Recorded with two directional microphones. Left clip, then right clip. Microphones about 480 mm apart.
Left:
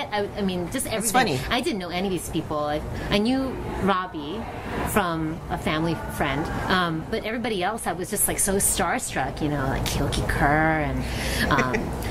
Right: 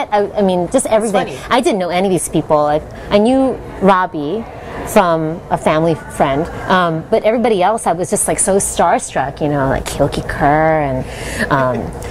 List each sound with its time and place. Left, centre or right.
0.1 s a woman's voice: right